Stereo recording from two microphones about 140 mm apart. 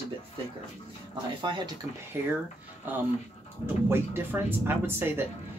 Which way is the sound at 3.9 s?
15° right (ahead or behind).